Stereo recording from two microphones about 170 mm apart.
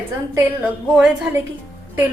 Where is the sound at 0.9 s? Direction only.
5° right (ahead or behind).